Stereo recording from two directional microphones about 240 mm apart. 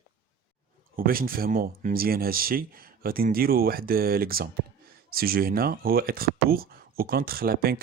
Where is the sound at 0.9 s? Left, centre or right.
Right.